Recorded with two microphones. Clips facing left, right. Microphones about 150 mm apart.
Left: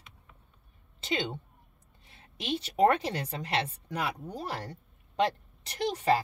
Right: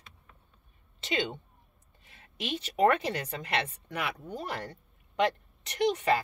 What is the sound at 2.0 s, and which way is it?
A woman's voice, 35° left (ahead or behind).